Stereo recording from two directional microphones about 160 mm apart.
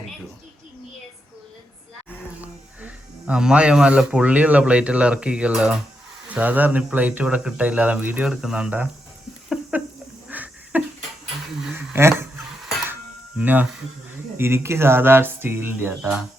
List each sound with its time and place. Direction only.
2.4 s speech: 10° right (ahead or behind)
10.2 s a sound: 10° right (ahead or behind)
14.3 s speech: 15° right (ahead or behind)